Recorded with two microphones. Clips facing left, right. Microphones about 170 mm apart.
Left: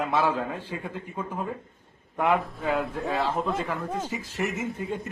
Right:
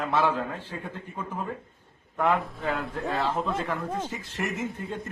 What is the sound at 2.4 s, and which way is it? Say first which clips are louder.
A man's voice: left 3 dB; centre (ahead or behind).